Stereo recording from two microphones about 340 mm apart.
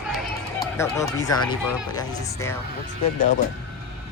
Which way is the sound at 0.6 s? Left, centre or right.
Centre.